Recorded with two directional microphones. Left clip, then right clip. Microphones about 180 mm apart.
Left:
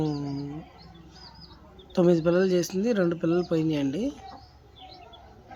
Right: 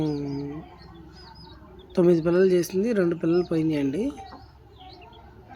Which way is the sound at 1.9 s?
5° left (ahead or behind).